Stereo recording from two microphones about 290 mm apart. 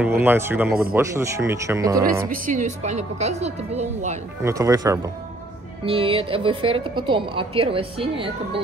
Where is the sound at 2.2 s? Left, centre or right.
Right.